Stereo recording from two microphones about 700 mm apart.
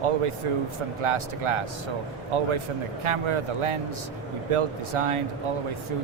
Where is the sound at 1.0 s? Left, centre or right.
Right.